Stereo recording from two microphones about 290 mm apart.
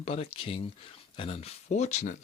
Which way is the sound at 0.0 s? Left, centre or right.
Left.